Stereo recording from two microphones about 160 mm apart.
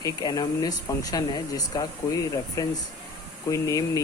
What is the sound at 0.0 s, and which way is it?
Speech, 25° left (ahead or behind).